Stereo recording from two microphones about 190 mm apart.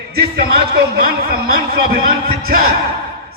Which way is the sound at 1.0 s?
50° right (ahead or behind).